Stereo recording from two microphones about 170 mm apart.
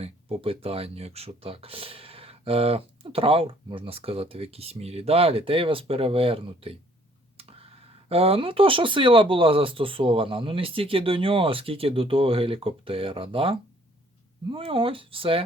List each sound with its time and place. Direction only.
0.0 s speech: 35° right (ahead or behind)
8.1 s speech: 35° right (ahead or behind)